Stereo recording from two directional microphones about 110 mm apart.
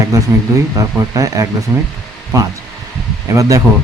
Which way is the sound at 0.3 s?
25° right (ahead or behind).